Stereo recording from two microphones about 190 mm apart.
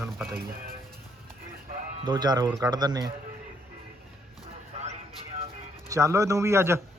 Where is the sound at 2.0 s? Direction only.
20° right (ahead or behind).